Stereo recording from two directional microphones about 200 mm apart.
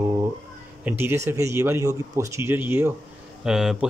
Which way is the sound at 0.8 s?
10° right (ahead or behind).